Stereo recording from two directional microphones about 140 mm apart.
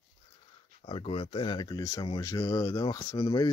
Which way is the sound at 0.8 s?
40° left (ahead or behind).